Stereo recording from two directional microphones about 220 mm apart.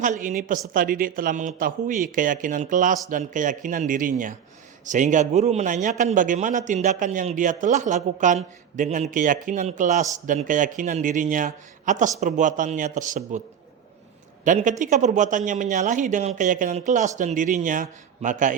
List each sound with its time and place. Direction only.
0.0 s a man's voice: 35° right (ahead or behind)
14.4 s a man's voice: 35° right (ahead or behind)